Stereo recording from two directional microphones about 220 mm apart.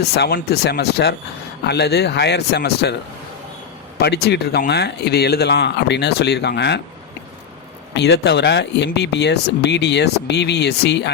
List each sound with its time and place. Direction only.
0.1 s speech: 45° left (ahead or behind)
4.0 s speech: 50° left (ahead or behind)
7.9 s speech: 50° left (ahead or behind)